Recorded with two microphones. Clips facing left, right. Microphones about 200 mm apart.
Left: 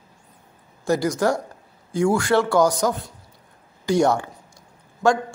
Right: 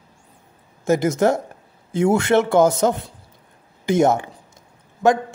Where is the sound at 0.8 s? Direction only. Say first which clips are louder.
Right 3 dB; 20° right (ahead or behind).